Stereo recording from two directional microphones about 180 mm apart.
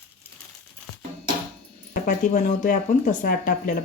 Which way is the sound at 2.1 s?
40° left (ahead or behind).